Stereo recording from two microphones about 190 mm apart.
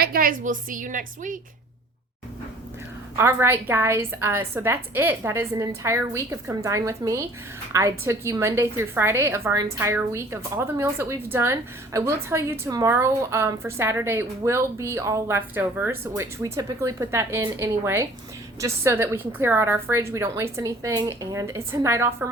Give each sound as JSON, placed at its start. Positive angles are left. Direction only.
{"t": 0.0, "sound": "a woman's voice", "side_deg": -50}
{"t": 3.2, "sound": "a woman's voice", "side_deg": -10}